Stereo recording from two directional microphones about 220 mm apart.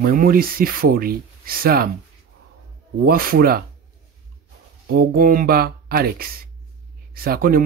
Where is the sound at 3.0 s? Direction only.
40° right (ahead or behind).